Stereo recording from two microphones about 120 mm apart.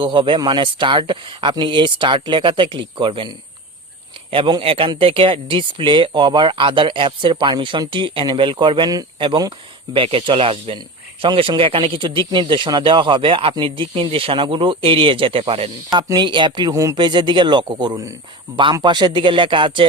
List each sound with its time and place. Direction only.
0.0 s speech: 45° right (ahead or behind)
15.9 s speech: 35° right (ahead or behind)
16.7 s speech: 25° right (ahead or behind)
17.0 s speech: 40° right (ahead or behind)